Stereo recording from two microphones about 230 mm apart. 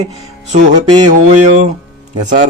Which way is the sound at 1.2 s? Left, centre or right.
Right.